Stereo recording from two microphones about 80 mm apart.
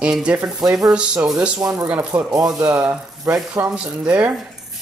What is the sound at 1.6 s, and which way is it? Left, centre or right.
Speech, right.